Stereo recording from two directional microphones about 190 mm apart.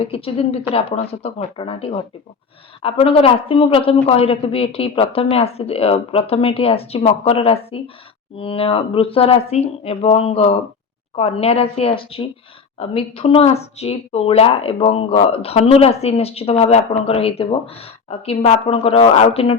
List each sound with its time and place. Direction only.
0.0 s a woman's voice: 30° left (ahead or behind)